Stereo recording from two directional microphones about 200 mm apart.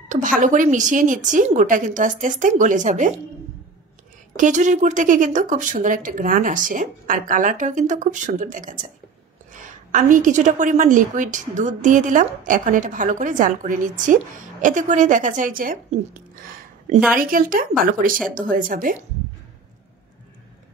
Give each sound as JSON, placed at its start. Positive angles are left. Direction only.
{"t": 0.1, "sound": "a woman's voice", "side_deg": -40}
{"t": 4.4, "sound": "a woman's voice", "side_deg": -40}
{"t": 9.8, "sound": "a woman's voice", "side_deg": -40}